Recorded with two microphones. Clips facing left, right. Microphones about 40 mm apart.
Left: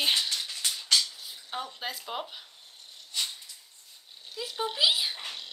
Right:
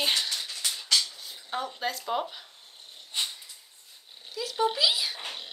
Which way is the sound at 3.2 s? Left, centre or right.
Right.